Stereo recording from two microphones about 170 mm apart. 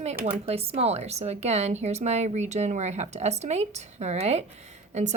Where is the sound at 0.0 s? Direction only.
40° right (ahead or behind).